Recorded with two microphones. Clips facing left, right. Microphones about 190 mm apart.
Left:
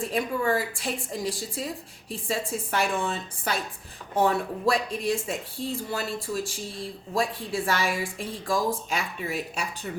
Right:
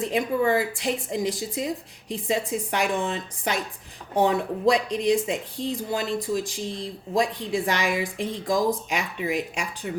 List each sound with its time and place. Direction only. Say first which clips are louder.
0.0 s a woman's voice: right 4 dB; 20° right (ahead or behind)